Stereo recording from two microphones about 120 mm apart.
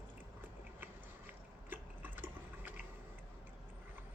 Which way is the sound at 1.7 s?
15° right (ahead or behind).